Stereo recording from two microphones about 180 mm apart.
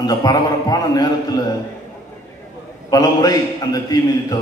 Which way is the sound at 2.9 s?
20° left (ahead or behind).